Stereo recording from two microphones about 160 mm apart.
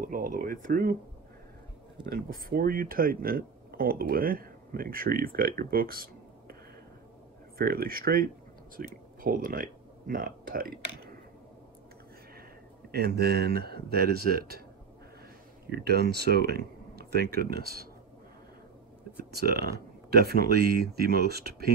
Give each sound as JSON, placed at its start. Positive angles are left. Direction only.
{"t": 0.0, "sound": "speech", "side_deg": -60}
{"t": 2.0, "sound": "speech", "side_deg": -65}
{"t": 7.5, "sound": "speech", "side_deg": -70}
{"t": 12.9, "sound": "speech", "side_deg": -85}
{"t": 15.7, "sound": "speech", "side_deg": -90}
{"t": 19.3, "sound": "speech", "side_deg": -75}